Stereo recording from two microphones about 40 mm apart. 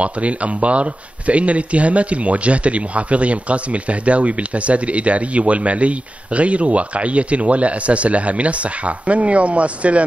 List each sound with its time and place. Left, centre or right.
0.0 s speech: right